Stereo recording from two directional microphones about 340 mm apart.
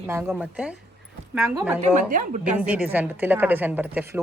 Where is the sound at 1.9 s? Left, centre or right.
Right.